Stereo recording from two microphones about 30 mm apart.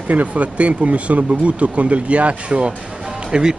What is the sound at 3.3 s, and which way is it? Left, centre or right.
Speech, right.